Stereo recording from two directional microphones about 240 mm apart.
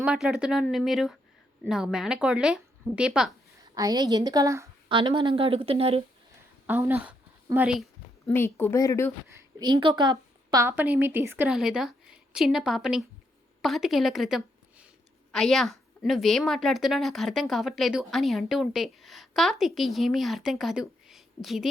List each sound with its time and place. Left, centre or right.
0.0 s a woman's voice: centre
3.8 s a woman's voice: centre
6.7 s a woman's voice: centre
8.3 s speech: centre
9.3 s a woman's voice: centre